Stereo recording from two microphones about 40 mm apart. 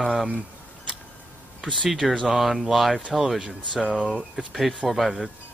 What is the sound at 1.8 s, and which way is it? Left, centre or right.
Speech, centre.